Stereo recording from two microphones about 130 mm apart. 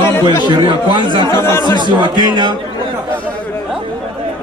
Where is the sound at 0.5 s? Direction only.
35° right (ahead or behind).